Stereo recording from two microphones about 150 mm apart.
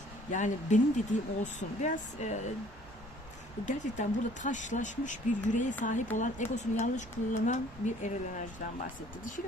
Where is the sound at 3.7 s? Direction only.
55° left (ahead or behind).